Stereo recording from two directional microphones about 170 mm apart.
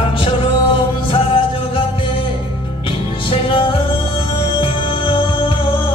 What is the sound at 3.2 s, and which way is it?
Music, 30° left (ahead or behind).